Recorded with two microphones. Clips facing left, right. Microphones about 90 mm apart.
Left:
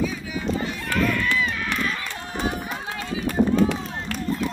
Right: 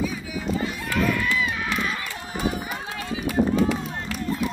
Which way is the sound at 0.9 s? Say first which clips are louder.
Left 1 dB; 10° right (ahead or behind).